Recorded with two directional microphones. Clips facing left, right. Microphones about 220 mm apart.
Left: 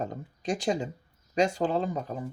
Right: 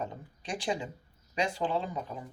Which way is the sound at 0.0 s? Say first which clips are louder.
Left 6 dB; 40° left (ahead or behind).